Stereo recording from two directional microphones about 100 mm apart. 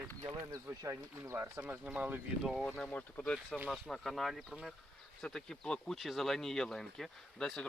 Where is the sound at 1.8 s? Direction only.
15° right (ahead or behind).